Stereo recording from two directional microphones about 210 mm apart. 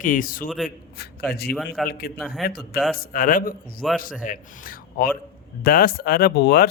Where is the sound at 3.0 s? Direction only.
40° left (ahead or behind).